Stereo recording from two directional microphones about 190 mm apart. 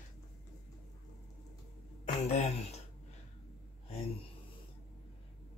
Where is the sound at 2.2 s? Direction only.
35° left (ahead or behind).